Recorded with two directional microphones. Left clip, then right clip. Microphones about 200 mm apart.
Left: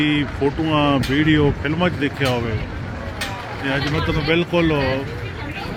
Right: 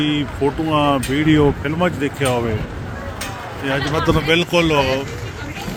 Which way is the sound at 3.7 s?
20° right (ahead or behind).